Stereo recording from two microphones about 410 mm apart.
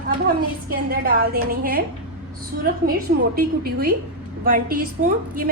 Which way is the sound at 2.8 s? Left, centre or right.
Right.